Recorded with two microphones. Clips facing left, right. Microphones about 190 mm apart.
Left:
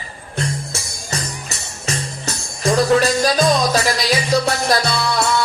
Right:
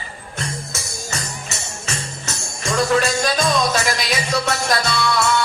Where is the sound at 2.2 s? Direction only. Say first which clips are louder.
Left 7 dB; 35° left (ahead or behind).